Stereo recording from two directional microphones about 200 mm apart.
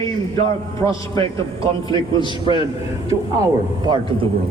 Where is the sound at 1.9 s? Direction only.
25° left (ahead or behind).